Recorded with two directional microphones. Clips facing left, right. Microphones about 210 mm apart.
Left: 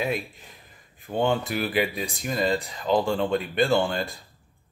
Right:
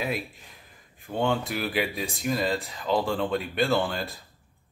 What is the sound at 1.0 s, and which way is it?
Speech, centre (ahead or behind).